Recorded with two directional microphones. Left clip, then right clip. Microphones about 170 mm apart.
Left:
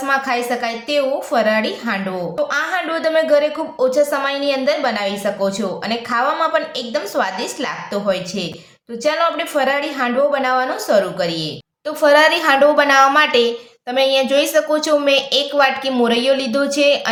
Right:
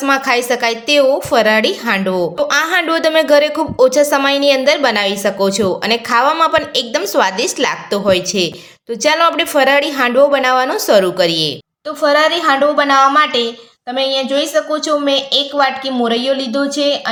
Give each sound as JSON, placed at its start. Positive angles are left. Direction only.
{"t": 0.0, "sound": "a woman's voice", "side_deg": -50}
{"t": 12.0, "sound": "a woman's voice", "side_deg": 15}